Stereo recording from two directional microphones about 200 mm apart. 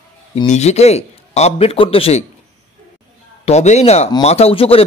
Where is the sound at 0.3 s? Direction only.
30° left (ahead or behind).